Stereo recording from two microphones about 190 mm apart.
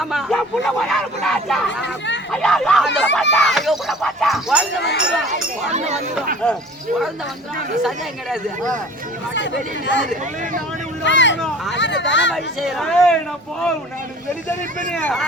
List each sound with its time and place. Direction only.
0.0 s speech: centre (ahead or behind)
4.8 s speech: 65° left (ahead or behind)
5.3 s speech: 35° right (ahead or behind)
6.4 s speech: 5° left (ahead or behind)
7.8 s speech: centre (ahead or behind)
9.3 s speech: 70° left (ahead or behind)
11.3 s hubbub: centre (ahead or behind)
11.7 s speech: 70° left (ahead or behind)
12.3 s speech: centre (ahead or behind)
14.9 s speech: 5° left (ahead or behind)